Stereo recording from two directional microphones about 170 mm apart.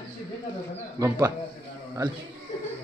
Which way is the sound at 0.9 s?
20° right (ahead or behind).